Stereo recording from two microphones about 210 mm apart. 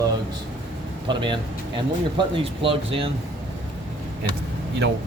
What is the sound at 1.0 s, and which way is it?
Speech, 20° right (ahead or behind).